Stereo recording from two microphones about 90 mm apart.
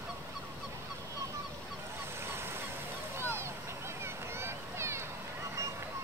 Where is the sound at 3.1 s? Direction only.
30° right (ahead or behind).